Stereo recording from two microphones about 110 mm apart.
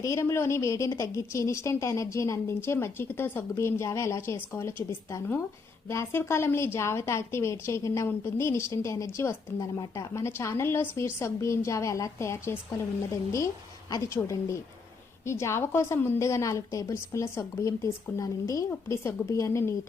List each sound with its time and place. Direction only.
0.0 s a woman's voice: 25° left (ahead or behind)